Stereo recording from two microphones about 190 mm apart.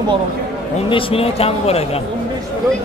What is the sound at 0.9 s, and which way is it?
Speech, 30° left (ahead or behind).